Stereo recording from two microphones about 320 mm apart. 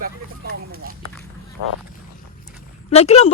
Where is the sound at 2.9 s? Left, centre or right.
Centre.